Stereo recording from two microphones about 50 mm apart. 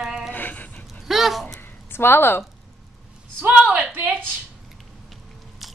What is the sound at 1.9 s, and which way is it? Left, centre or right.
Speech, left.